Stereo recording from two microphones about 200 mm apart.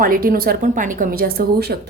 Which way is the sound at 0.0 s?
45° right (ahead or behind).